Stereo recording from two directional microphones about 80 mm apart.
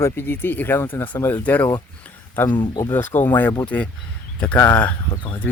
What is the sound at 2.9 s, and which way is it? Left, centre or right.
Speech, left.